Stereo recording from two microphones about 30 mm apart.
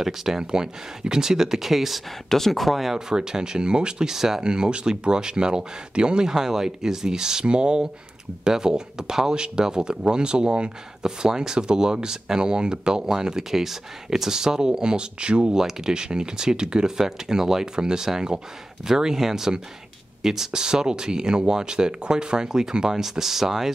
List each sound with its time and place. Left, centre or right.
0.0 s speech: centre
0.4 s speech: right; by 2.0 s centre
2.2 s speech: centre
3.1 s speech: right
4.1 s speech: centre
4.4 s speech: right
6.2 s speech: centre; by 10.7 s right
11.0 s speech: right
15.5 s speech: right
17.7 s speech: right
20.2 s a sound: centre
20.5 s speech: right